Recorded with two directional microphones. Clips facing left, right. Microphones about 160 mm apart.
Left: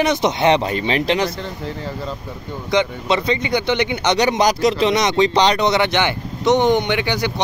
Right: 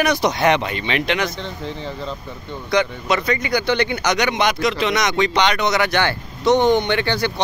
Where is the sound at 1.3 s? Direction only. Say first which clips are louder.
Left 1 dB; 5° left (ahead or behind).